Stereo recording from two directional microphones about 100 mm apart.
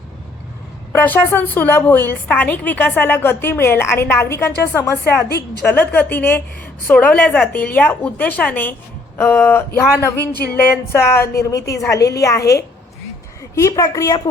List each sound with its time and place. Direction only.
0.9 s a woman's voice: 20° left (ahead or behind); by 14.2 s 35° left (ahead or behind)